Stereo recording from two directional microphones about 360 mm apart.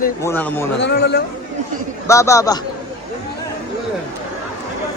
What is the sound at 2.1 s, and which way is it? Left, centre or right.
Speech, centre.